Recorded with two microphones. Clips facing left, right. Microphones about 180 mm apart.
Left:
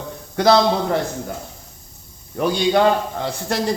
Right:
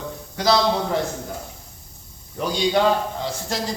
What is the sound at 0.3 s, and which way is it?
Speech, 55° left (ahead or behind).